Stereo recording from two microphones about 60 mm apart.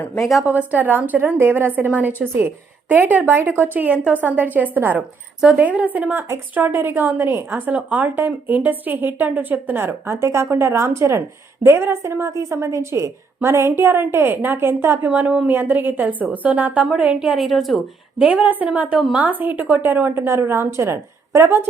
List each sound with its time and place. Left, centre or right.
0.2 s speech: centre
0.4 s a woman's voice: right
10.5 s a woman's voice: right
12.3 s a woman's voice: right
12.5 s a woman's voice: right
13.7 s speech: right
15.0 s a woman's voice: right
15.4 s a woman's voice: right
17.2 s a woman's voice: centre
17.4 s speech: centre
18.2 s a woman's voice: right
20.1 s a woman's voice: right